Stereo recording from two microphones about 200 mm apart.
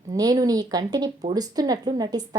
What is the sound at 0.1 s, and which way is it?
A woman's voice, 20° right (ahead or behind).